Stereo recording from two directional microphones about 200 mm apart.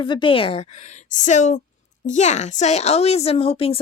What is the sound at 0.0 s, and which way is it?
A woman's voice, 25° left (ahead or behind).